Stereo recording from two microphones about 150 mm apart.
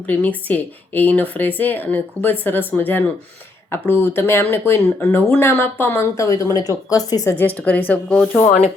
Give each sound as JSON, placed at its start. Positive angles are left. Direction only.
{"t": 0.1, "sound": "speech", "side_deg": 10}
{"t": 7.3, "sound": "speech", "side_deg": 10}